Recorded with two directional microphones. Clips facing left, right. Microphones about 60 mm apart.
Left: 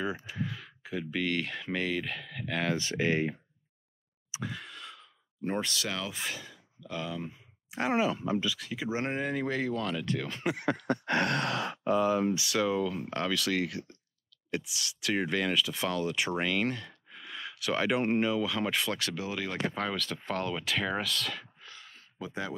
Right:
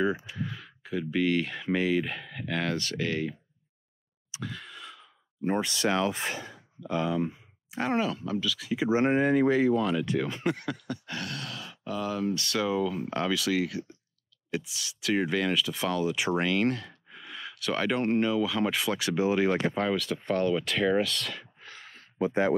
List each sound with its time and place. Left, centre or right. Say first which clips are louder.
0.4 s speech: even; centre
2.7 s speech: left 1 dB; centre
4.3 s sigh: even; centre
5.8 s speech: right 8 dB; right
7.7 s speech: even; centre
8.7 s speech: right 11 dB; right
10.8 s sigh: left 8 dB; left
11.9 s speech: left 4 dB; left
12.4 s speech: right 1 dB; centre
19.0 s speech: right 10 dB; right
19.7 s speech: right 5 dB; centre
21.5 s a sound: right 3 dB; right
21.8 s a sound: right 13 dB; right